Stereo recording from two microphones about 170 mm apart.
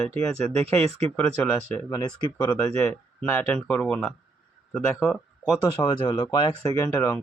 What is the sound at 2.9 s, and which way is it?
Speech, 10° left (ahead or behind).